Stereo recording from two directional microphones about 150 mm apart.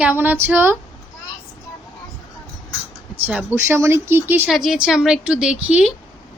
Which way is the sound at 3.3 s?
5° right (ahead or behind).